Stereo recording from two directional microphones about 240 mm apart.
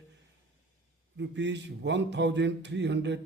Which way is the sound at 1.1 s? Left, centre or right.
Right.